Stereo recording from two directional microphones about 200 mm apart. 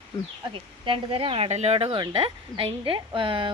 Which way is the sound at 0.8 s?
25° right (ahead or behind).